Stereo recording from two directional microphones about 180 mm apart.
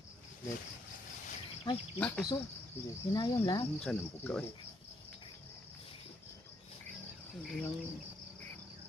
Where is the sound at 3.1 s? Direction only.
20° left (ahead or behind).